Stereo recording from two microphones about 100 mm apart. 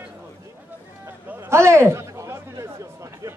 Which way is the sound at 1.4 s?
30° right (ahead or behind).